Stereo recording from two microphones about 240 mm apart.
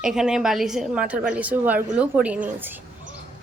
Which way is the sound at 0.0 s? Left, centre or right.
Centre.